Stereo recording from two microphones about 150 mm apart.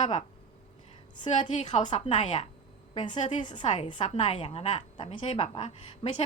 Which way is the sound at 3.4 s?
30° left (ahead or behind).